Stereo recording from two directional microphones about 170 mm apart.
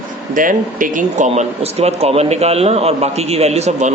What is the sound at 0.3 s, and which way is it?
Speech, 50° right (ahead or behind).